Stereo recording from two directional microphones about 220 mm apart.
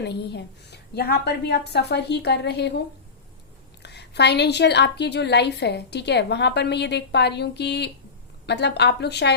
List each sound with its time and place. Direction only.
0.0 s a woman's voice: 50° left (ahead or behind)
3.8 s a woman's voice: 50° left (ahead or behind)